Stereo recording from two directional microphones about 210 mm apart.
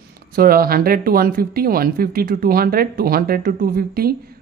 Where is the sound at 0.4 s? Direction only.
45° right (ahead or behind).